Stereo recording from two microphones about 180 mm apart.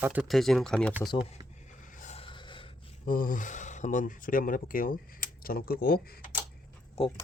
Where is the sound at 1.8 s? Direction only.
45° left (ahead or behind); by 2.7 s 25° left (ahead or behind).